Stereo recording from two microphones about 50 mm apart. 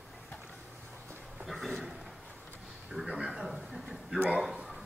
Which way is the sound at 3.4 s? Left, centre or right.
Centre.